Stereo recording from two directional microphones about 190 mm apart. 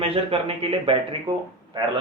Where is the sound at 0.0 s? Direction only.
30° right (ahead or behind).